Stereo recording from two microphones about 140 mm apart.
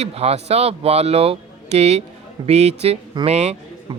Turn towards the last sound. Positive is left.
turn(degrees=-50)  # may be behind; listen again after turning